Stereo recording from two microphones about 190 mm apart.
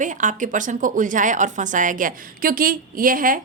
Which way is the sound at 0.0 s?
40° right (ahead or behind).